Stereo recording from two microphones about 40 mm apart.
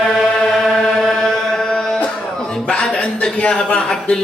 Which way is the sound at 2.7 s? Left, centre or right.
Left.